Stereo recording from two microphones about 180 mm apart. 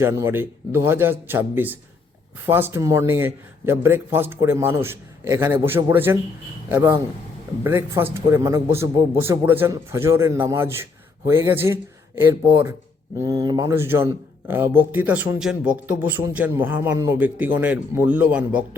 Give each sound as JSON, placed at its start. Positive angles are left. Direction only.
{"t": 0.0, "sound": "speech", "side_deg": -15}